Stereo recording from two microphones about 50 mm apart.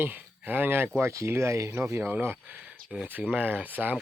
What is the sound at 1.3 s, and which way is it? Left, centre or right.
Speech, right.